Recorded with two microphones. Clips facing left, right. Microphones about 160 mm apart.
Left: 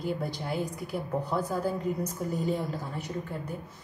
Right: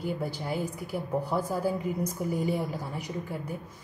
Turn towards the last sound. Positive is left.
turn(degrees=-10)  # may be behind; listen again after turning